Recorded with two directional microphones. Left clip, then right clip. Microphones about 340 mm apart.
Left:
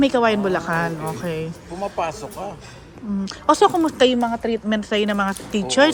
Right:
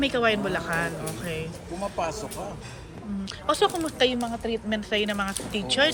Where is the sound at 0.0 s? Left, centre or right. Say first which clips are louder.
Left 6 dB; centre.